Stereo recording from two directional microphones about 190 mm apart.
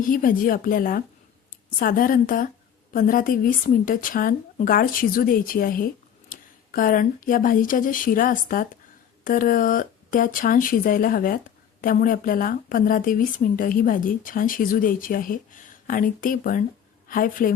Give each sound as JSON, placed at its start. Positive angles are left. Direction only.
{"t": 0.0, "sound": "speech", "side_deg": 45}